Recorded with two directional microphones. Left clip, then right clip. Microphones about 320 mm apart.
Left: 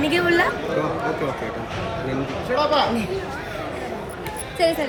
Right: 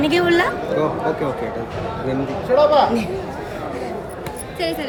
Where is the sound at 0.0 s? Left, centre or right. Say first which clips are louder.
Right 2 dB; centre.